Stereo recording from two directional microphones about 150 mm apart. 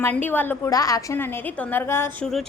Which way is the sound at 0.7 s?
25° left (ahead or behind).